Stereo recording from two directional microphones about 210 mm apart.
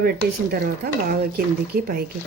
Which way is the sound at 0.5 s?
45° right (ahead or behind).